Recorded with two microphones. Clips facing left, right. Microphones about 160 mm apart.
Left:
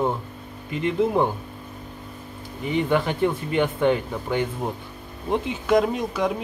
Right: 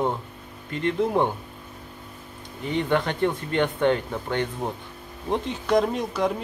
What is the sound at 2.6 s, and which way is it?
Speech, 5° left (ahead or behind).